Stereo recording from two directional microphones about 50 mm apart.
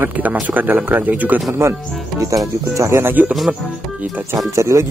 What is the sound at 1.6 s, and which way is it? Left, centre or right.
Speech, right.